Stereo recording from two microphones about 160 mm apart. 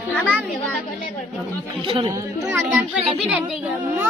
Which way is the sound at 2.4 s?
5° right (ahead or behind).